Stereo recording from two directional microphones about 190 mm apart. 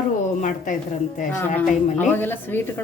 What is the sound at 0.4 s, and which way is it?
Speech, 40° left (ahead or behind).